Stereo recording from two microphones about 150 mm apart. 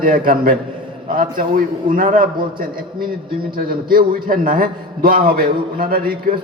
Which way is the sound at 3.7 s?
70° right (ahead or behind).